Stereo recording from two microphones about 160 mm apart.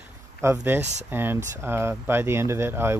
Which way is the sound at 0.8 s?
45° right (ahead or behind).